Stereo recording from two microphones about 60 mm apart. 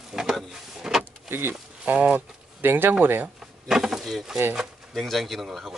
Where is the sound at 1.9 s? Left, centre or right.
Right.